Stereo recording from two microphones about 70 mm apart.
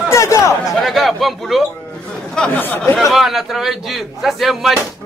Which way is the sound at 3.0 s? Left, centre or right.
Centre.